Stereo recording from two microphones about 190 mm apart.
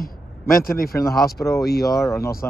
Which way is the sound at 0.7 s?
50° left (ahead or behind).